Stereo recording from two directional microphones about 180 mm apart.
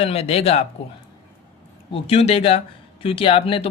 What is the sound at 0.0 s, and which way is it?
Speech, 35° left (ahead or behind).